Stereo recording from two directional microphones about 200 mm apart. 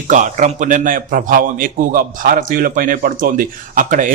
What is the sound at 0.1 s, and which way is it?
A man's voice, 40° right (ahead or behind).